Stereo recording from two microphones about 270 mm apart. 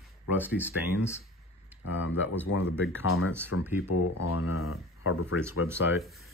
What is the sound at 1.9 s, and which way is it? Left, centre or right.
Speech, left.